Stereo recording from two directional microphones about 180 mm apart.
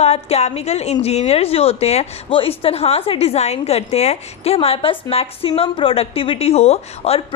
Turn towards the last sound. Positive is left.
turn(degrees=35)  # may be behind; listen again after turning